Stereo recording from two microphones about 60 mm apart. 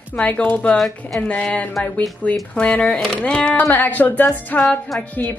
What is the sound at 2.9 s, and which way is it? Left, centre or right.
Speech, centre.